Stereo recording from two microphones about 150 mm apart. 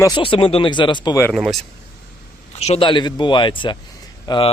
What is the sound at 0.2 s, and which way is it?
Speech, 35° left (ahead or behind).